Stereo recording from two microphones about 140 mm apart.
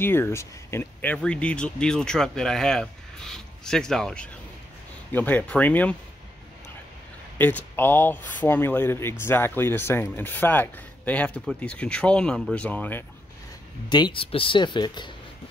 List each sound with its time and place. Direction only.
0.0 s speech: 15° left (ahead or behind)
1.1 s speech: 5° left (ahead or behind)
7.3 s speech: 15° left (ahead or behind)
13.8 s speech: 30° left (ahead or behind)